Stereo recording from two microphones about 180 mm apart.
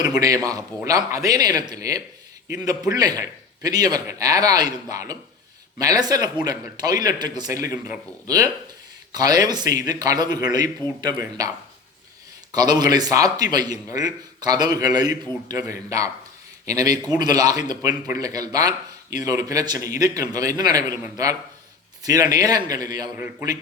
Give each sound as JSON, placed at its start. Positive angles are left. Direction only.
{"t": 0.0, "sound": "a man's voice", "side_deg": -20}
{"t": 9.1, "sound": "a man's voice", "side_deg": -20}
{"t": 23.1, "sound": "speech", "side_deg": -10}